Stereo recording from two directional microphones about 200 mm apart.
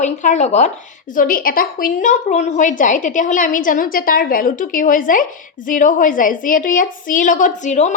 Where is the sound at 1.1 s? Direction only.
45° left (ahead or behind).